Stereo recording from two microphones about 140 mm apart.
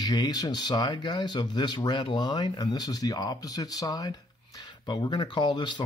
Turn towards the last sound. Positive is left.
turn(degrees=35)  # may be behind; listen again after turning